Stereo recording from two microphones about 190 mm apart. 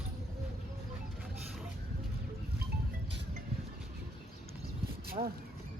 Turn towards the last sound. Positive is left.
turn(degrees=-30)  # may be behind; listen again after turning